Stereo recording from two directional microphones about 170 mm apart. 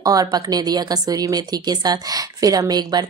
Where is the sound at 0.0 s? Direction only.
20° right (ahead or behind).